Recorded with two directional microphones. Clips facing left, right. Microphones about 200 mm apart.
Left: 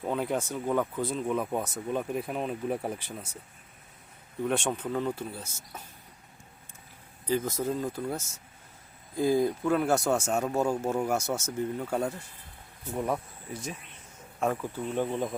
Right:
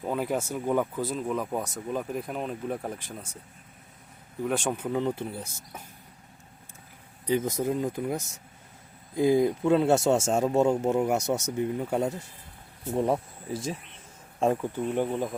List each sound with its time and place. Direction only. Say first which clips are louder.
0.0 s speech: right 1 dB; 5° right (ahead or behind)
4.4 s speech: right 1 dB; 5° right (ahead or behind)
7.3 s speech: right 2 dB; 15° right (ahead or behind)
14.9 s speech: left 1 dB; 10° right (ahead or behind)